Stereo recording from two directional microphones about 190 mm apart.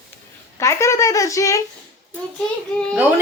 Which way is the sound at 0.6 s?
15° left (ahead or behind).